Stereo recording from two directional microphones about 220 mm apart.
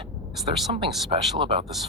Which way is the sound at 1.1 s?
25° right (ahead or behind).